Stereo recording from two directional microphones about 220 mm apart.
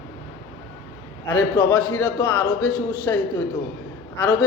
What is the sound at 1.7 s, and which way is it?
A man's voice, 5° left (ahead or behind).